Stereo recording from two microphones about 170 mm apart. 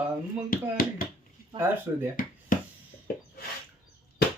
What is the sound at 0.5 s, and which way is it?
Speech, 60° left (ahead or behind).